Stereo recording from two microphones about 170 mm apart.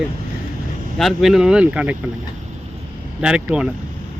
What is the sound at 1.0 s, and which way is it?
Speech, centre (ahead or behind).